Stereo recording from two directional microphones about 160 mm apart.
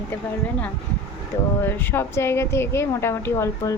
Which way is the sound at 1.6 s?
15° left (ahead or behind).